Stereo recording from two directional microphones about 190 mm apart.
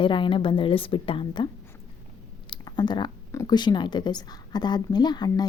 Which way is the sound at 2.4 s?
20° left (ahead or behind).